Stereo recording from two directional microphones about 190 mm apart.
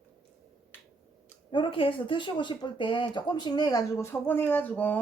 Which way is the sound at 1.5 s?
25° left (ahead or behind).